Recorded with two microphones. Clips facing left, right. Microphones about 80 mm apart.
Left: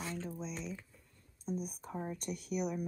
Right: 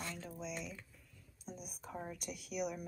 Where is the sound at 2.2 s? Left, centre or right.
Left.